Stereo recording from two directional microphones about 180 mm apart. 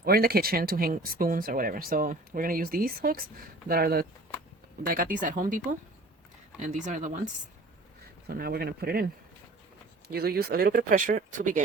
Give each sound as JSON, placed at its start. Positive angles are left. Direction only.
{"t": 0.0, "sound": "speech", "side_deg": -55}
{"t": 8.3, "sound": "speech", "side_deg": -60}
{"t": 10.1, "sound": "speech", "side_deg": -60}